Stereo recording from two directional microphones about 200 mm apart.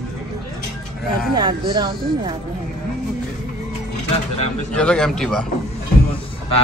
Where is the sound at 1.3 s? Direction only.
20° right (ahead or behind).